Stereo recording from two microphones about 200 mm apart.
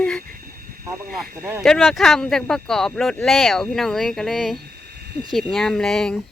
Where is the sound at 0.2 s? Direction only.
45° right (ahead or behind).